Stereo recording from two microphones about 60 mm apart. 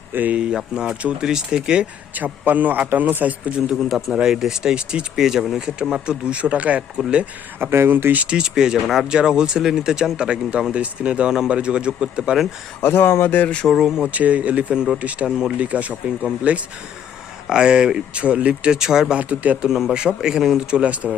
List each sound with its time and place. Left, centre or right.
0.1 s speech: right
0.3 s speech: centre
2.1 s speech: right
3.8 s a man's voice: centre; by 7.0 s right
7.6 s speech: right
8.1 s speech: centre
12.8 s speech: left
13.3 s speech: left
13.7 s speech: centre
14.1 s speech: right
19.2 s speech: right
19.6 s speech: centre
20.7 s speech: right